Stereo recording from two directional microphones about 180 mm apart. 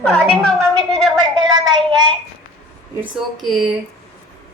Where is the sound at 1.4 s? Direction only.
25° right (ahead or behind).